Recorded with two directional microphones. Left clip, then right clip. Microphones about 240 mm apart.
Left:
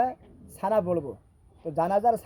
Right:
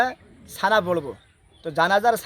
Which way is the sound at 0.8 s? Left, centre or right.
Centre.